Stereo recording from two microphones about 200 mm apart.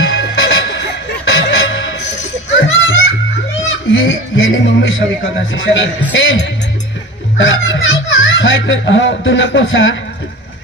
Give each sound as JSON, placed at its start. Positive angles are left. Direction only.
{"t": 0.0, "sound": "music", "side_deg": 70}
{"t": 3.7, "sound": "a man's voice", "side_deg": 75}